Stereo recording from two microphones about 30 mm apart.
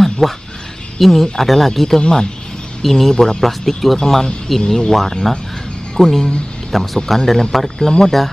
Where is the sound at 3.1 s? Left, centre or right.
Centre.